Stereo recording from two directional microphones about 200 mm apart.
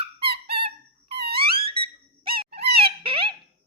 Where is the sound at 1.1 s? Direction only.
50° right (ahead or behind).